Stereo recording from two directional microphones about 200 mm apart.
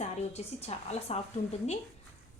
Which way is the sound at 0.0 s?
30° left (ahead or behind).